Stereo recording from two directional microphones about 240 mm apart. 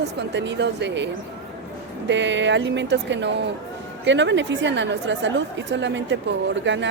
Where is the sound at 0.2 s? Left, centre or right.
Right.